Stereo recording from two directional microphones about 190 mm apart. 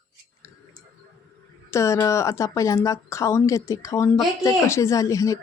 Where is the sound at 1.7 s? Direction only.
15° left (ahead or behind).